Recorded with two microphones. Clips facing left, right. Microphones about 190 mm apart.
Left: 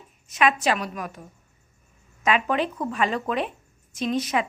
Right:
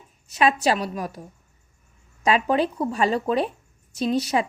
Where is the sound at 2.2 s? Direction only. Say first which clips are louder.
Right 3 dB; 35° right (ahead or behind).